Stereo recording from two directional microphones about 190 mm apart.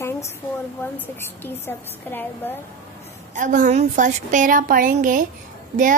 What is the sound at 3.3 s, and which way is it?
Speech, 40° right (ahead or behind).